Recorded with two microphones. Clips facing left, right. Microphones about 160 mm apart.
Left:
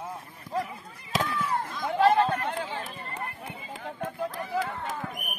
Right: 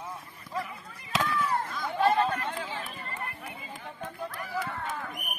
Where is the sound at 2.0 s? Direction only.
60° left (ahead or behind).